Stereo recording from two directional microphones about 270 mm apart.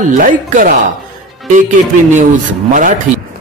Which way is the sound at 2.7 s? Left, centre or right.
Right.